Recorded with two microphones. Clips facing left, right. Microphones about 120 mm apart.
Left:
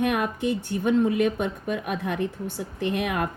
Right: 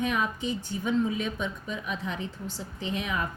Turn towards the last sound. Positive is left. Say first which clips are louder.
# left 5 dB
turn(degrees=60)  # may be behind; listen again after turning